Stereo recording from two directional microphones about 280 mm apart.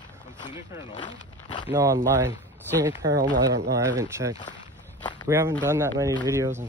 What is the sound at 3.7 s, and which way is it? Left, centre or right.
Speech, centre.